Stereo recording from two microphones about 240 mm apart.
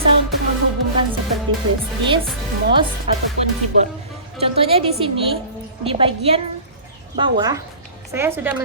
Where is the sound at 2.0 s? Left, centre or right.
Right.